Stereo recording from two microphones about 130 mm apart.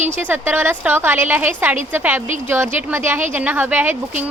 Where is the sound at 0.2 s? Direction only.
15° right (ahead or behind).